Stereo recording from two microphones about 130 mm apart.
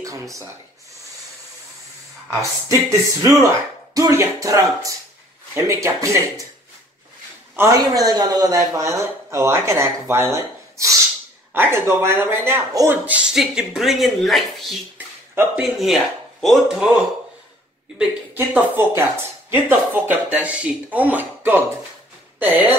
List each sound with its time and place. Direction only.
0.0 s speech: 25° right (ahead or behind)
2.9 s speech: 25° right (ahead or behind)
7.5 s speech: 25° right (ahead or behind); by 16.7 s centre (ahead or behind)
17.9 s speech: 10° right (ahead or behind)